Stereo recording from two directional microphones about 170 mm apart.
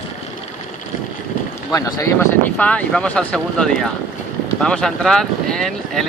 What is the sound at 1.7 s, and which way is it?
Speech, 20° left (ahead or behind).